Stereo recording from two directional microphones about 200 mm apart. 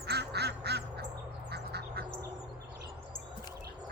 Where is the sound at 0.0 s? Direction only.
55° right (ahead or behind).